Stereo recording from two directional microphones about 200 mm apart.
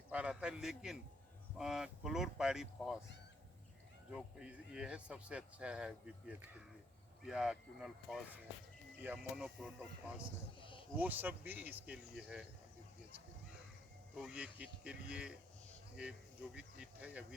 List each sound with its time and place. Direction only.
0.1 s a man's voice: 5° right (ahead or behind)
4.1 s speech: 5° right (ahead or behind)
10.6 s a sound: 25° left (ahead or behind)
10.9 s speech: 10° right (ahead or behind)
14.2 s speech: 5° right (ahead or behind)